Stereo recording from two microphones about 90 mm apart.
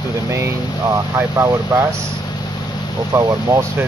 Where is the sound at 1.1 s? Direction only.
30° right (ahead or behind).